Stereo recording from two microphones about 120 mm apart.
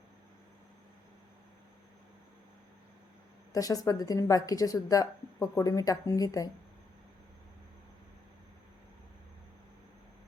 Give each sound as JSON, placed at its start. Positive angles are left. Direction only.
{"t": 3.5, "sound": "speech", "side_deg": 30}